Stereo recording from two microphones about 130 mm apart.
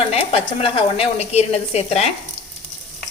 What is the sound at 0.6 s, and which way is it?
A woman's voice, 50° left (ahead or behind).